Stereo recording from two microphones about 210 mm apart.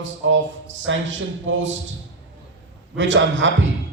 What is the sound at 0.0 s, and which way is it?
A man's voice, 65° right (ahead or behind).